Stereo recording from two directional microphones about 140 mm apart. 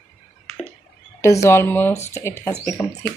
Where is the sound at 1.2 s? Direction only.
20° left (ahead or behind).